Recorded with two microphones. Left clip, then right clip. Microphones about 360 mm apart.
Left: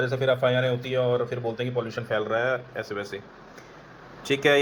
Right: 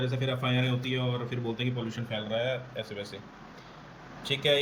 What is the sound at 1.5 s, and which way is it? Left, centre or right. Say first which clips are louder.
Speech: left 6 dB; centre.